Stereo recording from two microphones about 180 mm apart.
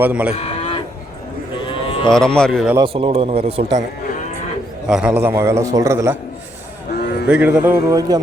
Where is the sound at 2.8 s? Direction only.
30° right (ahead or behind).